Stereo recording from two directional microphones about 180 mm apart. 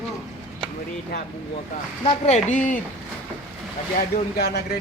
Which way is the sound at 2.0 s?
35° left (ahead or behind).